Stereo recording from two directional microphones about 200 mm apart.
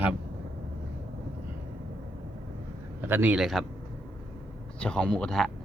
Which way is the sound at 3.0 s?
10° right (ahead or behind).